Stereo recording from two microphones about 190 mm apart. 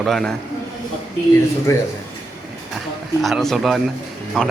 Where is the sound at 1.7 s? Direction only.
15° left (ahead or behind).